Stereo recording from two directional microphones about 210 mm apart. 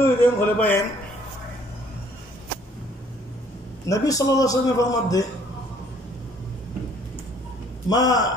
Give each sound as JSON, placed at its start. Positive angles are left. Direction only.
{"t": 0.0, "sound": "a man's voice", "side_deg": 10}
{"t": 3.8, "sound": "a man's voice", "side_deg": 15}
{"t": 7.9, "sound": "a man's voice", "side_deg": 20}